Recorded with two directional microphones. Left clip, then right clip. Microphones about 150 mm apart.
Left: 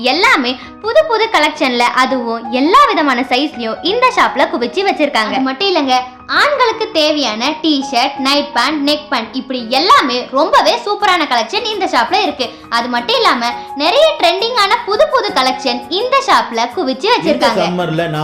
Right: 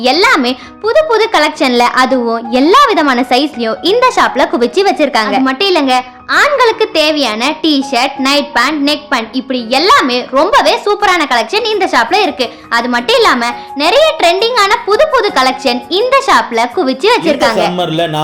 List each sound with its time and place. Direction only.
0.0 s a child's voice: 45° right (ahead or behind)